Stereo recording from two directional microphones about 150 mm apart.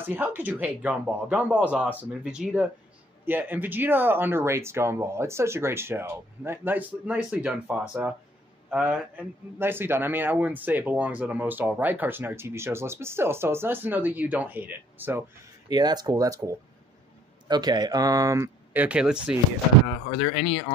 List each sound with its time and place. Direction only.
0.0 s a man's voice: 15° right (ahead or behind)
15.7 s speech: 25° right (ahead or behind); by 19.3 s 5° right (ahead or behind)
20.2 s speech: 45° left (ahead or behind)